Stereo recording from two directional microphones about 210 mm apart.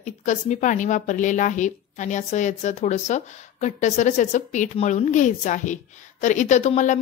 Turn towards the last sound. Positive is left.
turn(degrees=35)  # may be behind; listen again after turning